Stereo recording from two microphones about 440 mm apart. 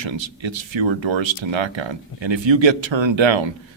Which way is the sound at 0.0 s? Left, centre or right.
Right.